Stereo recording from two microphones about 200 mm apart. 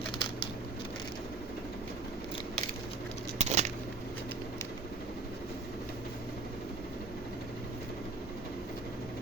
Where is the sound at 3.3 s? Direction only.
35° right (ahead or behind).